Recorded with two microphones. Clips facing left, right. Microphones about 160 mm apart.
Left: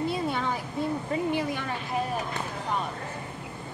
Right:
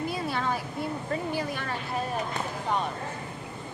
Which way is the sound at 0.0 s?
25° left (ahead or behind).